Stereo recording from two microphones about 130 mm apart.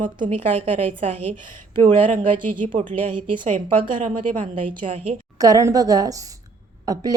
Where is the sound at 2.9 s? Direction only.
45° right (ahead or behind).